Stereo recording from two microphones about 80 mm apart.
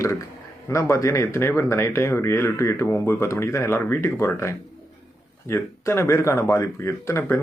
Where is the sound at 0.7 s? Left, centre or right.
Left.